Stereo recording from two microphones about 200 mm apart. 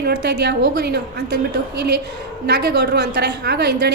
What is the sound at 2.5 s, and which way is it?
A woman's voice, 55° right (ahead or behind).